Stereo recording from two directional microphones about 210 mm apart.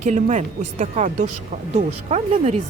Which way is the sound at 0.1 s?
35° right (ahead or behind).